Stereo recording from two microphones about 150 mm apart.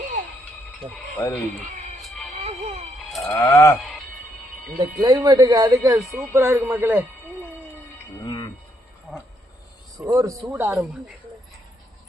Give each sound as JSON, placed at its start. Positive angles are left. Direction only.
{"t": 0.8, "sound": "speech", "side_deg": -35}
{"t": 1.2, "sound": "speech", "side_deg": 15}
{"t": 2.0, "sound": "music", "side_deg": 0}
{"t": 2.3, "sound": "music", "side_deg": -45}
{"t": 3.1, "sound": "sheep", "side_deg": 0}
{"t": 3.3, "sound": "sheep", "side_deg": 20}
{"t": 4.8, "sound": "speech", "side_deg": -25}
{"t": 6.0, "sound": "speech", "side_deg": 0}
{"t": 6.3, "sound": "speech", "side_deg": -15}
{"t": 8.2, "sound": "music", "side_deg": 25}
{"t": 10.0, "sound": "speech", "side_deg": -20}
{"t": 10.7, "sound": "speech", "side_deg": -10}